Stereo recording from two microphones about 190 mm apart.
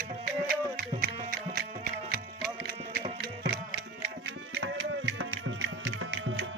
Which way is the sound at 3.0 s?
50° right (ahead or behind).